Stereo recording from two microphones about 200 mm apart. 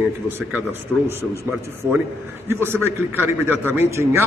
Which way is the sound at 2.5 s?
10° right (ahead or behind).